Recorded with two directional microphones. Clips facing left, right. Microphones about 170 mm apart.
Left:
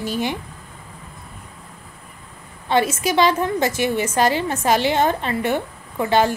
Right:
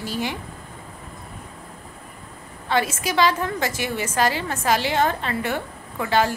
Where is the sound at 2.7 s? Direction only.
25° left (ahead or behind).